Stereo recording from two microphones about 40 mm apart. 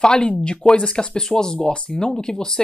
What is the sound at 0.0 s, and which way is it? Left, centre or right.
A woman's voice, left.